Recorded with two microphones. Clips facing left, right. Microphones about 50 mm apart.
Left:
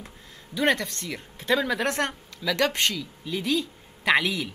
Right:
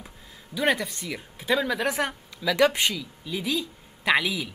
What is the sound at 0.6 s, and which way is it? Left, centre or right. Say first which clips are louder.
A woman's voice: left 1 dB; centre.